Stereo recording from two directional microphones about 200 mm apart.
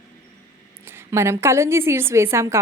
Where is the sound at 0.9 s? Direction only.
10° right (ahead or behind).